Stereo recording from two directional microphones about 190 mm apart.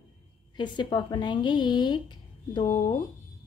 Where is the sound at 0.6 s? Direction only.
25° left (ahead or behind).